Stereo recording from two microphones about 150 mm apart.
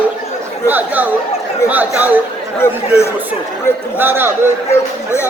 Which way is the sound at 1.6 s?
10° right (ahead or behind).